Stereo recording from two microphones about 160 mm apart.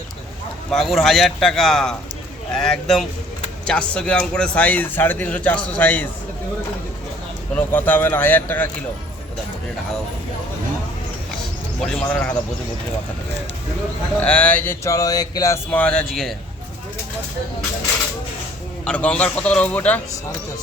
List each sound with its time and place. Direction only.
0.7 s a man's voice: centre (ahead or behind)
7.5 s a man's voice: 10° left (ahead or behind)
11.8 s a man's voice: 5° left (ahead or behind)
14.2 s a man's voice: 10° left (ahead or behind)
15.7 s a man's voice: 5° left (ahead or behind)
18.9 s a man's voice: 5° left (ahead or behind)